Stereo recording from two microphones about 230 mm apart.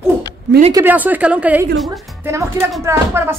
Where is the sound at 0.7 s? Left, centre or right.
Centre.